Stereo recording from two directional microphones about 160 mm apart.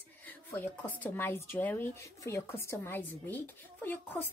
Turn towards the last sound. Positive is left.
turn(degrees=10)  # may be behind; listen again after turning